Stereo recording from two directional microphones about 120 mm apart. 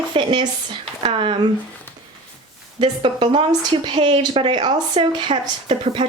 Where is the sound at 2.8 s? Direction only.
45° right (ahead or behind).